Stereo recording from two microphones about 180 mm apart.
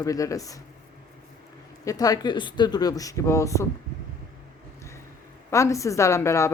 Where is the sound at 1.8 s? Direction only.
20° left (ahead or behind).